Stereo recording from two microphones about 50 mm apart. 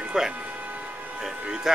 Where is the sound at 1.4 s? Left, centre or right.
Centre.